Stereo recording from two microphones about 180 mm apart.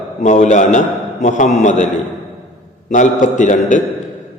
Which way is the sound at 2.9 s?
45° left (ahead or behind).